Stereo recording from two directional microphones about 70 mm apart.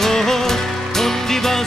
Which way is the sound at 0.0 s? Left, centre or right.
Centre.